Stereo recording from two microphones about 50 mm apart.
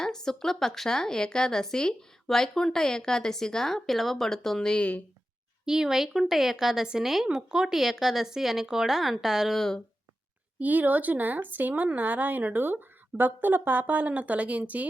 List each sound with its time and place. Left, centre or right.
0.0 s a woman's voice: centre
4.8 s speech: left
5.6 s a woman's voice: centre
9.6 s a woman's voice: centre
10.6 s a woman's voice: right